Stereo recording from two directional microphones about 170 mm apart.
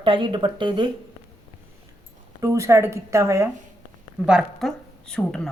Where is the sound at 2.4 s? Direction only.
20° right (ahead or behind).